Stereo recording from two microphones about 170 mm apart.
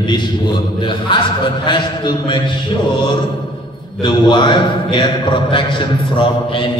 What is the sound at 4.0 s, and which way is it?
A man's voice, 30° left (ahead or behind).